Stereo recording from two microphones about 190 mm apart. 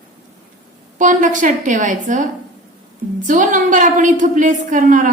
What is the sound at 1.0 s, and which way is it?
A woman's voice, 40° right (ahead or behind).